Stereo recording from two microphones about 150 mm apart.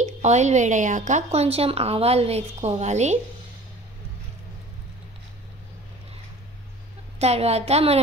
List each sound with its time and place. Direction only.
0.0 s a woman's voice: 50° right (ahead or behind)
7.2 s a woman's voice: 45° right (ahead or behind)